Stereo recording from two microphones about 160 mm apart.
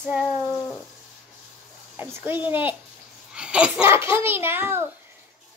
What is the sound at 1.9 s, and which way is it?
A child's voice, 15° right (ahead or behind).